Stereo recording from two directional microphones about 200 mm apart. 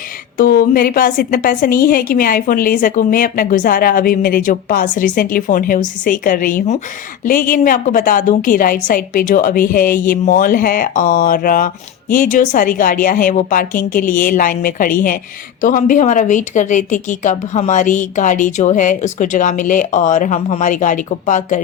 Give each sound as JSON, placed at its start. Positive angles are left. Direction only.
{"t": 0.3, "sound": "a woman's voice", "side_deg": 45}